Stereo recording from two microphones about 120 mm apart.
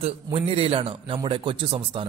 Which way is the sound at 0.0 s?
50° right (ahead or behind).